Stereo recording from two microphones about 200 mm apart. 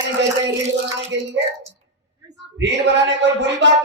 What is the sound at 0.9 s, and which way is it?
Speech, 60° right (ahead or behind).